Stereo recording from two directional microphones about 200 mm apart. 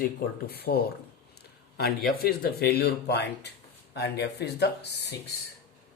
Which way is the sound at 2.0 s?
50° left (ahead or behind).